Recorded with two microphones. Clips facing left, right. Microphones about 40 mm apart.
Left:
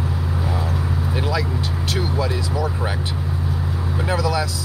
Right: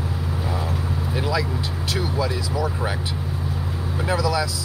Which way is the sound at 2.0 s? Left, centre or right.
Left.